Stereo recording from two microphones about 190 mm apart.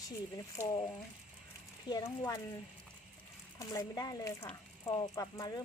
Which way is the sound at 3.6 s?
20° left (ahead or behind).